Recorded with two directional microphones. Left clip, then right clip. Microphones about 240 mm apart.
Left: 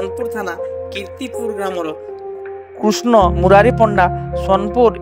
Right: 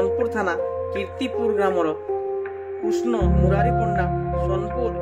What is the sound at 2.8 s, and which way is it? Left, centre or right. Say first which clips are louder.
Speech: left 11 dB; left.